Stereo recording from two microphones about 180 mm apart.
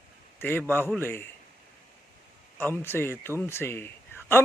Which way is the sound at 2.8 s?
15° left (ahead or behind).